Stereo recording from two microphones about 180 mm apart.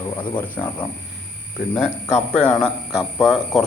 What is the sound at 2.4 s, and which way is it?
A man's voice, 5° left (ahead or behind).